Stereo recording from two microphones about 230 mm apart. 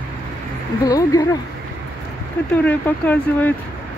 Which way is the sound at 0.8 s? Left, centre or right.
Centre.